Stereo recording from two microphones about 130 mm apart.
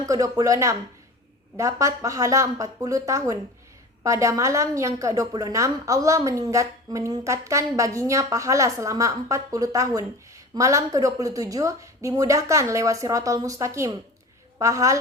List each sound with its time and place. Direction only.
0.0 s a woman's voice: 25° right (ahead or behind)